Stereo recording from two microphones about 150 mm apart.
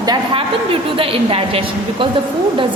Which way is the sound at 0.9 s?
40° right (ahead or behind).